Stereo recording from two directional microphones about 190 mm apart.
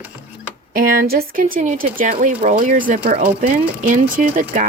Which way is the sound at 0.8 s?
50° right (ahead or behind).